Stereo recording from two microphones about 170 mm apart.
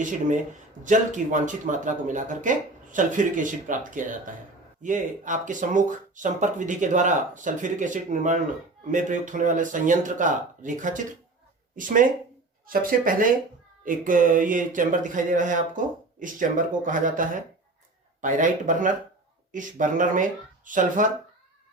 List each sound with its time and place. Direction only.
0.0 s speech: 50° right (ahead or behind)
12.6 s speech: 55° right (ahead or behind)